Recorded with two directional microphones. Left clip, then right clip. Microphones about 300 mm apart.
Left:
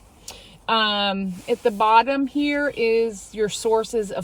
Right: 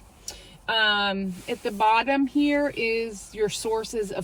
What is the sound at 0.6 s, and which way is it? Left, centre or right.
Speech, centre.